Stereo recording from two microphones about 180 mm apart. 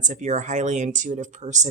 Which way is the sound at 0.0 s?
40° right (ahead or behind).